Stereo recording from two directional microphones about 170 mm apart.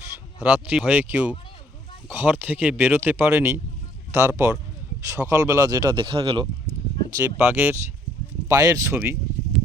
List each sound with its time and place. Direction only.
0.3 s speech: 5° right (ahead or behind); by 6.5 s 25° right (ahead or behind)
7.3 s speech: 10° right (ahead or behind)